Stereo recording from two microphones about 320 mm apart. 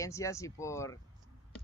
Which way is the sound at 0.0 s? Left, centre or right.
Centre.